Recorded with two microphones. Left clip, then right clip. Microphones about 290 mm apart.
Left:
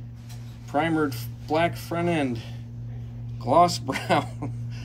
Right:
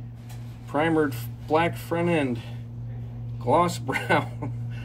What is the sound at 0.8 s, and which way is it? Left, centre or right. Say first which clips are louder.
Speech: right 1 dB; centre.